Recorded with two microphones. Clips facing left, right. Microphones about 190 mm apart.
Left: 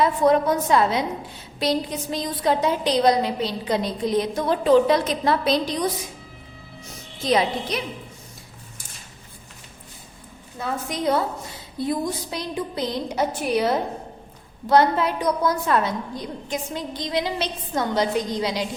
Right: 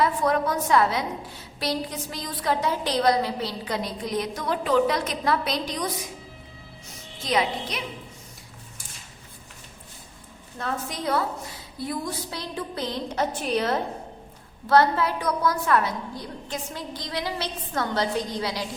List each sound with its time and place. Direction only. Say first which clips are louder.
0.0 s a woman's voice: left 5 dB; 20° left (ahead or behind)
7.3 s a woman's voice: left 4 dB; 30° left (ahead or behind)
10.6 s a woman's voice: left 4 dB; 10° left (ahead or behind)